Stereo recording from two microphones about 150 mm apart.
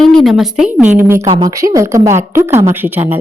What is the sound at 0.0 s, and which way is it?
A woman's voice, centre (ahead or behind).